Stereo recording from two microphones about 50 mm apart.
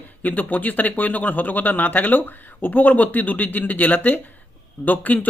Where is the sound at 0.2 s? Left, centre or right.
Left.